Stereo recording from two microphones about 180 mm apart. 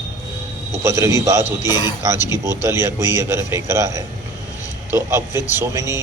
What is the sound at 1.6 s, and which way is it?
Speech, 20° left (ahead or behind).